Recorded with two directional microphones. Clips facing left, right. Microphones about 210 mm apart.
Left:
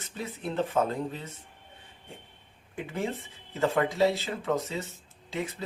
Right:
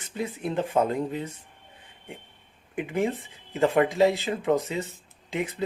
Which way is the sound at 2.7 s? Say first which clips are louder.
Right 6 dB; 15° right (ahead or behind).